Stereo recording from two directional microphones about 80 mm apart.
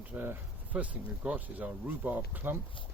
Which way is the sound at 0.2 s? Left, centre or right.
Right.